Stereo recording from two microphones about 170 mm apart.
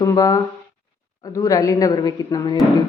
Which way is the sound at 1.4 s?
20° left (ahead or behind).